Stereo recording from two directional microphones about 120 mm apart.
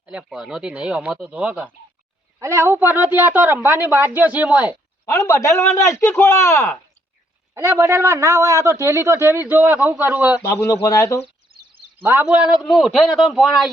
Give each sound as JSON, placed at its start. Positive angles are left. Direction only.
{"t": 0.0, "sound": "a woman's voice", "side_deg": -10}
{"t": 2.4, "sound": "a woman's voice", "side_deg": -25}
{"t": 5.1, "sound": "speech", "side_deg": 25}
{"t": 7.5, "sound": "a woman's voice", "side_deg": -25}
{"t": 10.5, "sound": "speech", "side_deg": 30}
{"t": 12.0, "sound": "a woman's voice", "side_deg": -15}